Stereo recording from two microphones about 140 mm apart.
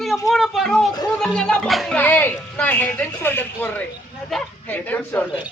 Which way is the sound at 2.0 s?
15° left (ahead or behind).